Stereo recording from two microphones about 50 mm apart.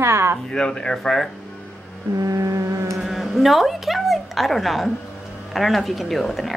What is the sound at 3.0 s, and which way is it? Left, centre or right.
A woman's voice, centre.